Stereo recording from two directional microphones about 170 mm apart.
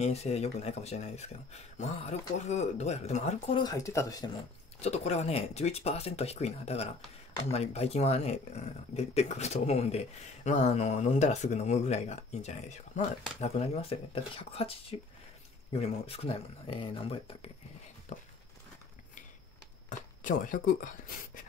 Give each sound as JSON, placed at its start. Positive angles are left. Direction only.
{"t": 0.0, "sound": "speech", "side_deg": 40}
{"t": 3.5, "sound": "speech", "side_deg": 20}
{"t": 4.8, "sound": "speech", "side_deg": 40}
{"t": 19.9, "sound": "speech", "side_deg": 50}